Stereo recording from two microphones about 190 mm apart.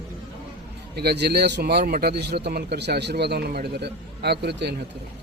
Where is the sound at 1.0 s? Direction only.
60° right (ahead or behind).